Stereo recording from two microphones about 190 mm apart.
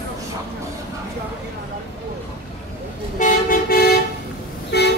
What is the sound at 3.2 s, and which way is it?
Toot, 45° left (ahead or behind).